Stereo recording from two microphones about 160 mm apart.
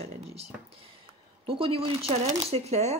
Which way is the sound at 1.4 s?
35° right (ahead or behind).